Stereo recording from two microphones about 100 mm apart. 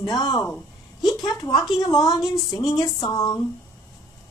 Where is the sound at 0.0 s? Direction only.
40° left (ahead or behind).